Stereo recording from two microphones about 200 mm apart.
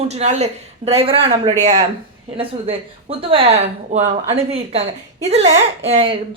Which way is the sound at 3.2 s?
25° right (ahead or behind).